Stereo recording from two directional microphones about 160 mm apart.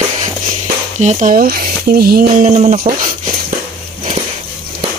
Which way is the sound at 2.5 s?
45° right (ahead or behind).